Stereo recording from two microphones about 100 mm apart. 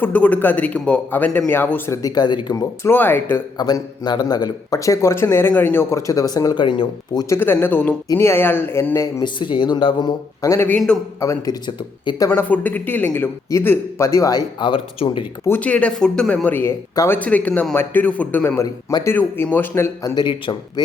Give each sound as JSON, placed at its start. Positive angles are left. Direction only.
{"t": 0.0, "sound": "a man's voice", "side_deg": 15}
{"t": 1.9, "sound": "a man's voice", "side_deg": 35}
{"t": 2.9, "sound": "speech", "side_deg": 20}
{"t": 3.6, "sound": "a man's voice", "side_deg": 45}
{"t": 7.3, "sound": "speech", "side_deg": 20}
{"t": 8.0, "sound": "speech", "side_deg": 30}
{"t": 9.2, "sound": "speech", "side_deg": 50}
{"t": 10.4, "sound": "a man's voice", "side_deg": 30}
{"t": 12.3, "sound": "a man's voice", "side_deg": 15}
{"t": 14.6, "sound": "speech", "side_deg": 55}
{"t": 15.4, "sound": "a man's voice", "side_deg": 15}
{"t": 18.5, "sound": "a man's voice", "side_deg": 35}
{"t": 19.0, "sound": "speech", "side_deg": 20}
{"t": 20.1, "sound": "speech", "side_deg": 50}